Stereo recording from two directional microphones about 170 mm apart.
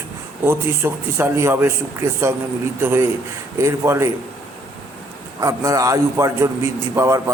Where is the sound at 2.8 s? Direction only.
15° right (ahead or behind).